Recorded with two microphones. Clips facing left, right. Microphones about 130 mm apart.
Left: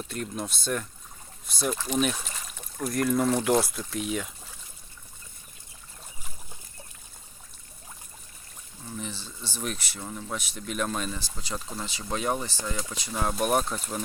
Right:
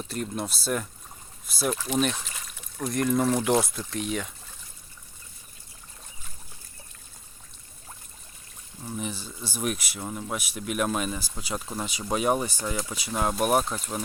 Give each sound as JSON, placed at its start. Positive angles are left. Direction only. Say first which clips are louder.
{"t": 0.1, "sound": "speech", "louder": "right 4 dB", "side_deg": -5}
{"t": 9.0, "sound": "speech", "louder": "right 3 dB", "side_deg": -15}